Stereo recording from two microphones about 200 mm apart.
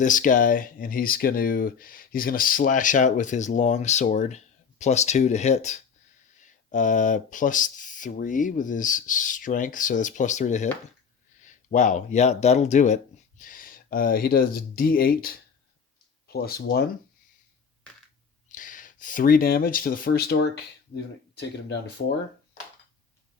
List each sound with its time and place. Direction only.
0.0 s speech: 40° left (ahead or behind)
18.4 s speech: 40° left (ahead or behind); by 21.8 s 60° left (ahead or behind)